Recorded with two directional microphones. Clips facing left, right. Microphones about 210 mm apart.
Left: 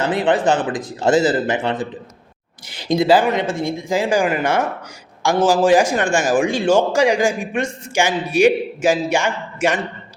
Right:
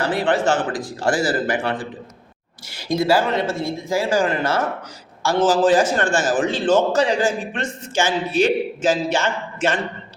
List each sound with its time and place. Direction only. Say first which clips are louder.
0.0 s a man's voice: left 2 dB; 20° left (ahead or behind)